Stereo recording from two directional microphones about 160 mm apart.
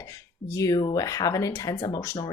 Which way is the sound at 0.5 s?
20° left (ahead or behind).